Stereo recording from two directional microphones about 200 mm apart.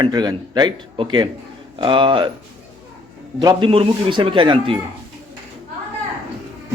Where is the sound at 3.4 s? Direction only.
25° right (ahead or behind).